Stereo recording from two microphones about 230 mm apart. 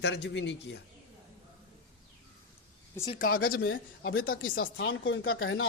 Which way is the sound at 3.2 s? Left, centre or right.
Left.